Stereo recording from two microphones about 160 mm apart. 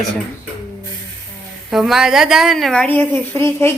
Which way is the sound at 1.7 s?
Centre (ahead or behind).